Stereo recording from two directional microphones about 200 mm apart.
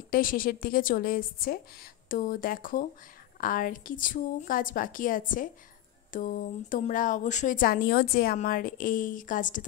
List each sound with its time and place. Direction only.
0.1 s speech: 45° left (ahead or behind)